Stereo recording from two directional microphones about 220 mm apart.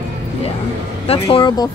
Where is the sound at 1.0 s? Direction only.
25° left (ahead or behind).